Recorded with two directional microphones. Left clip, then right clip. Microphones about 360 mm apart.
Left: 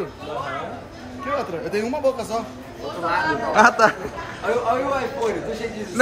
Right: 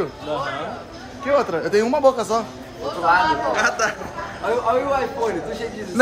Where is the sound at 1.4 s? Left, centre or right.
Centre.